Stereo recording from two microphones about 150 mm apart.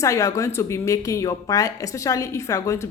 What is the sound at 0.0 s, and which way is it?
A woman's voice, 20° left (ahead or behind).